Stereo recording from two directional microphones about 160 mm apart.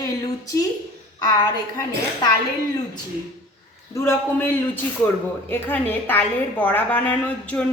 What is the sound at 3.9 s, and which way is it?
A woman's voice, 15° left (ahead or behind).